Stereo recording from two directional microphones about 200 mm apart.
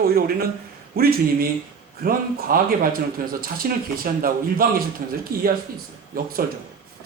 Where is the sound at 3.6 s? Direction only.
50° right (ahead or behind).